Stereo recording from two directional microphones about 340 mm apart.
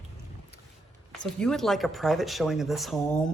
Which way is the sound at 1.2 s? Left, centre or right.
Centre.